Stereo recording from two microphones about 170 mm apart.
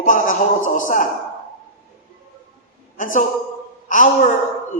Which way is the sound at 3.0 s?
50° left (ahead or behind).